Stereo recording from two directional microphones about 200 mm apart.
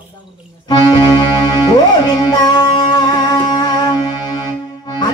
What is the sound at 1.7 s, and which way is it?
Music, 20° left (ahead or behind).